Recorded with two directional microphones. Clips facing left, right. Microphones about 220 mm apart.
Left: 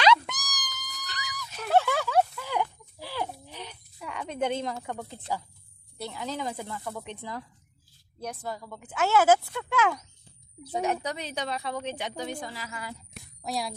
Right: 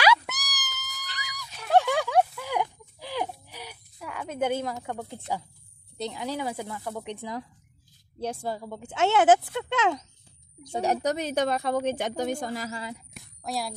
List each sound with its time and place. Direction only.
0.0 s cat: 10° right (ahead or behind)
5.9 s speech: 15° right (ahead or behind)
8.2 s speech: 30° right (ahead or behind)
10.7 s a woman's voice: 35° right (ahead or behind)
13.2 s a sound: centre (ahead or behind)